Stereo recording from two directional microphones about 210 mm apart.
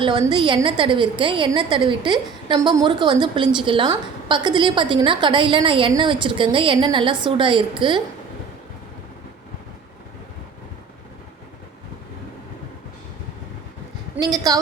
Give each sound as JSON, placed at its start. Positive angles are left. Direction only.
{"t": 0.0, "sound": "a woman's voice", "side_deg": -20}
{"t": 14.2, "sound": "a woman's voice", "side_deg": -15}